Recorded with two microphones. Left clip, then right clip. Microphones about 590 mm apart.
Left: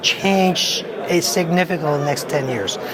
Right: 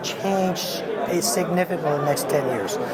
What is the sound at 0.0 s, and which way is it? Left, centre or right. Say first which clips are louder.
Speech: left 7 dB; left.